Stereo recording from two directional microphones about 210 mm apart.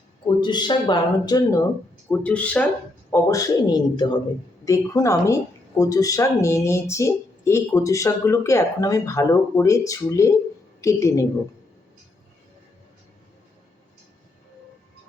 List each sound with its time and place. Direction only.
0.3 s a woman's voice: 20° left (ahead or behind)